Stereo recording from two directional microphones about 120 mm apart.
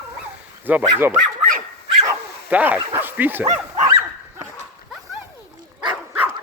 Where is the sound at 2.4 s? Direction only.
15° right (ahead or behind).